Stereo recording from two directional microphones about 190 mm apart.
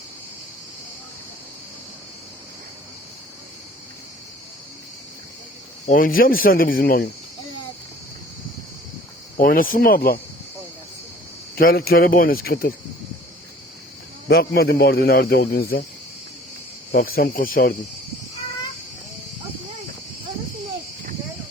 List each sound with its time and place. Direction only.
5.8 s speech: 45° left (ahead or behind)
9.4 s speech: 50° left (ahead or behind)
11.5 s speech: 50° left (ahead or behind)
14.3 s speech: 55° left (ahead or behind)
16.9 s speech: 50° left (ahead or behind)